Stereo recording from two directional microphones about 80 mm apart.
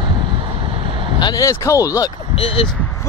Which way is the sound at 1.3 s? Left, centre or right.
Left.